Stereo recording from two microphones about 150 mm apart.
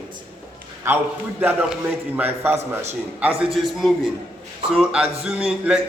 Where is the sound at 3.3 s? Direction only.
40° right (ahead or behind).